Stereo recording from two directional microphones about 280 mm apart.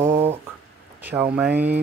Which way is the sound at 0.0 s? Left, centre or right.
Centre.